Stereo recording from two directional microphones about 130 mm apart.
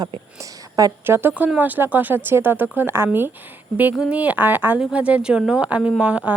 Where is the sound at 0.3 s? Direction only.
25° right (ahead or behind).